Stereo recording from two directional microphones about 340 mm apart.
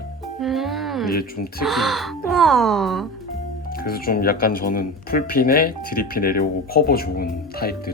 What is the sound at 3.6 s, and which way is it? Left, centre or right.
Speech, left.